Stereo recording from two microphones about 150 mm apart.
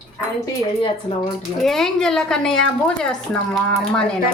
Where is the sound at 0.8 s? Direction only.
35° left (ahead or behind).